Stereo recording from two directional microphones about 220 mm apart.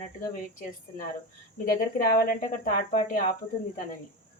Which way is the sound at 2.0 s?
40° left (ahead or behind).